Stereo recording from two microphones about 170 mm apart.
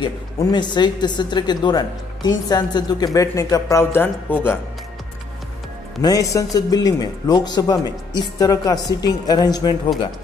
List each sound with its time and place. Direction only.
0.0 s a woman's voice: 25° left (ahead or behind)
6.0 s a woman's voice: 20° left (ahead or behind)